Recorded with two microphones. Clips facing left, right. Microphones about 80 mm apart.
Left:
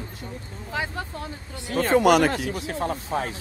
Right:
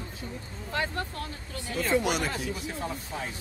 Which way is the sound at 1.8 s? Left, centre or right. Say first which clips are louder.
Left 9 dB; left.